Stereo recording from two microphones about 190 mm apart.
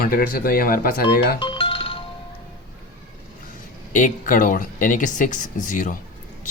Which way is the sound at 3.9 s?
45° left (ahead or behind).